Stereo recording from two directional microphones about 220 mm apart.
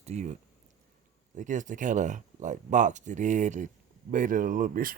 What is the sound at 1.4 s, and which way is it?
Speech, 35° right (ahead or behind).